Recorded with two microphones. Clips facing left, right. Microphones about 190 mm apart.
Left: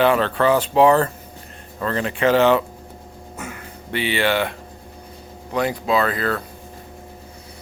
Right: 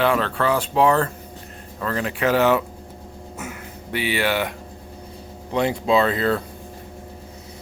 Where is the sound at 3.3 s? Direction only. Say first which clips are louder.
Left 1 dB; 5° right (ahead or behind).